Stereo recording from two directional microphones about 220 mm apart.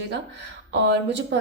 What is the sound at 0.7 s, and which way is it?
Speech, 55° right (ahead or behind).